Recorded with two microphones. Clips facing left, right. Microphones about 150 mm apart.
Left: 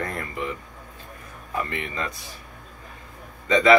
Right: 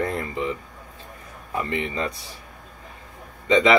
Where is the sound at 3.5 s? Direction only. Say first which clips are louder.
Left 1 dB; 20° right (ahead or behind).